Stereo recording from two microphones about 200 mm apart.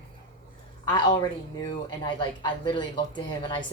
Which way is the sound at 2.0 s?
20° left (ahead or behind).